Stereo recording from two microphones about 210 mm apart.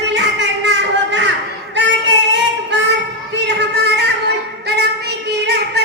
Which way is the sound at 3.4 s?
55° right (ahead or behind).